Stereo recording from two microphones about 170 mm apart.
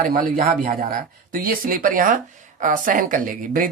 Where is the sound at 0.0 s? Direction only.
55° right (ahead or behind).